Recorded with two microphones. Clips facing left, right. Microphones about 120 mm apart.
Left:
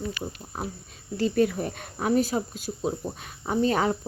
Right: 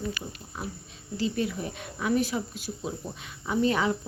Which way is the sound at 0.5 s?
40° left (ahead or behind).